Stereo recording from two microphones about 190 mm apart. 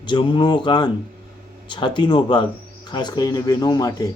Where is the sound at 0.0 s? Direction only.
25° left (ahead or behind).